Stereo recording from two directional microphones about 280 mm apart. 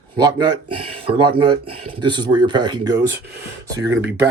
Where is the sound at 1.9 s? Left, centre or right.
Centre.